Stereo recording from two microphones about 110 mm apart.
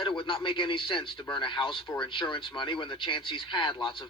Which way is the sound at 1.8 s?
35° left (ahead or behind).